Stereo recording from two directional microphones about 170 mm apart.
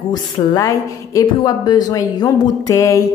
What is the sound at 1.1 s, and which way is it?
Speech, 25° left (ahead or behind).